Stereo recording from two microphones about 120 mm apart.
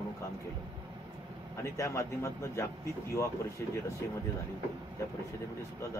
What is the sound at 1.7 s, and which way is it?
Speech, 25° left (ahead or behind).